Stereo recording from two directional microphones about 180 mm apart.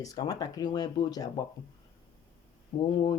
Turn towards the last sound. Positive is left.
turn(degrees=25)  # may be behind; listen again after turning